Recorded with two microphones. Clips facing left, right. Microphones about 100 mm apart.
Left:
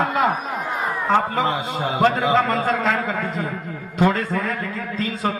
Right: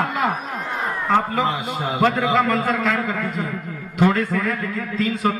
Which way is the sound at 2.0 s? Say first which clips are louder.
Left 1 dB; 30° left (ahead or behind).